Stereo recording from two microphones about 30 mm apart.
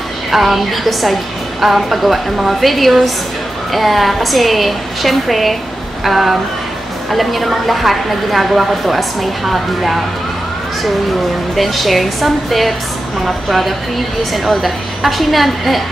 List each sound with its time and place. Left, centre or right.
0.3 s a woman's voice: centre
11.5 s a woman's voice: centre